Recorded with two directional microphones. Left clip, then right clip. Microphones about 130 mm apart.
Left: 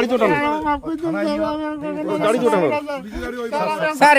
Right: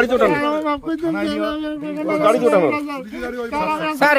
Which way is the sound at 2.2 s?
25° left (ahead or behind).